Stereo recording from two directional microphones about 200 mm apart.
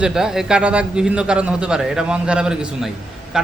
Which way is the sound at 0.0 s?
5° right (ahead or behind).